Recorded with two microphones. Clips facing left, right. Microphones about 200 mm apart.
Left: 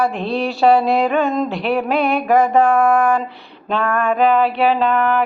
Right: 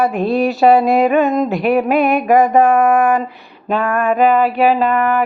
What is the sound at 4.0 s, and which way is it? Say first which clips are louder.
Mantra: right 2 dB; centre (ahead or behind).